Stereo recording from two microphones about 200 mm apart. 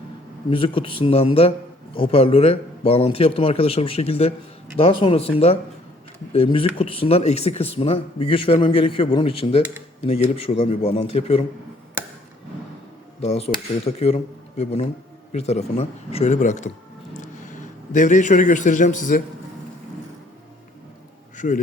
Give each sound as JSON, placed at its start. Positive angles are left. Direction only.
{"t": 0.5, "sound": "speech", "side_deg": 25}
{"t": 13.2, "sound": "a man's voice", "side_deg": 30}
{"t": 21.3, "sound": "speech", "side_deg": 40}